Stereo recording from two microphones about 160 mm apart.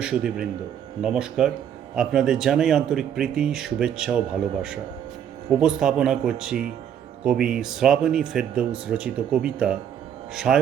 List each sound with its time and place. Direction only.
0.0 s speech: 5° right (ahead or behind)
5.5 s speech: 5° right (ahead or behind)